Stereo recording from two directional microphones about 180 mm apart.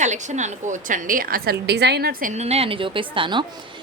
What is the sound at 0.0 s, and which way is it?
A woman's voice, 40° right (ahead or behind).